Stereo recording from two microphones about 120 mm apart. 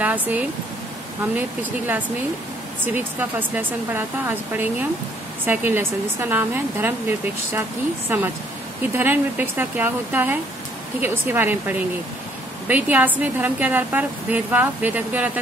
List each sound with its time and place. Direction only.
0.0 s a woman's voice: 15° right (ahead or behind)